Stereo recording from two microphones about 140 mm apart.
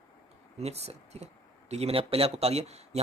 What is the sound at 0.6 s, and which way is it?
Speech, 50° right (ahead or behind).